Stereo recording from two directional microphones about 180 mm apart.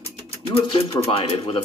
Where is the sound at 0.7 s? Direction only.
30° left (ahead or behind).